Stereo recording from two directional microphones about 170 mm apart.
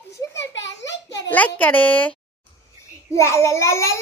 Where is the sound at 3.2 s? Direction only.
15° left (ahead or behind).